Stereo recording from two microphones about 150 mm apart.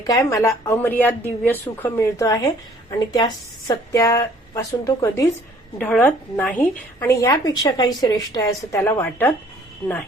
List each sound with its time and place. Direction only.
0.0 s speech: 25° left (ahead or behind)
5.8 s a woman's voice: 10° left (ahead or behind)
7.0 s speech: 20° left (ahead or behind)